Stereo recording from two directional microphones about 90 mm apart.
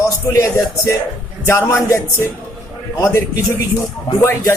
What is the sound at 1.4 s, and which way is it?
Music, 30° left (ahead or behind).